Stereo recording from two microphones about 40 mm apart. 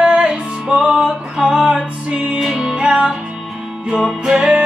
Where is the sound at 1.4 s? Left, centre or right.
Centre.